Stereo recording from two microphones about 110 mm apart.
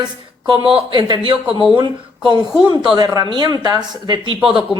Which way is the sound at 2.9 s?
35° right (ahead or behind).